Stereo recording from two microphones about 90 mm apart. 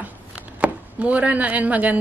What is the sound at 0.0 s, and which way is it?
Chopping, 15° right (ahead or behind).